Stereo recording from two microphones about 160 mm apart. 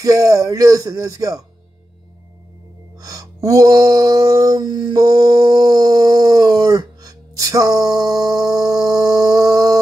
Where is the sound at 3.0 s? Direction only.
20° right (ahead or behind).